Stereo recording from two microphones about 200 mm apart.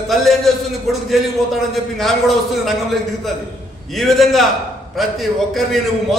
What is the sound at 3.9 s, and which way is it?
A man's voice, centre (ahead or behind).